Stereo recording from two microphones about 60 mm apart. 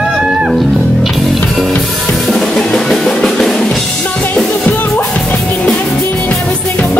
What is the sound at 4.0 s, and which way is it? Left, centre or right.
Drum kit, left.